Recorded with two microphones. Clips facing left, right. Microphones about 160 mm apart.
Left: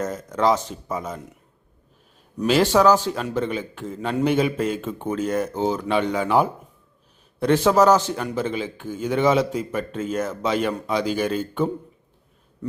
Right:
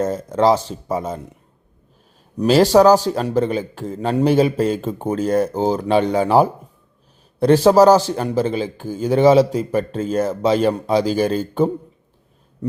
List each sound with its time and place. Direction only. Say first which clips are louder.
0.0 s a man's voice: right 5 dB; 30° right (ahead or behind)
2.4 s a man's voice: right 5 dB; 35° right (ahead or behind)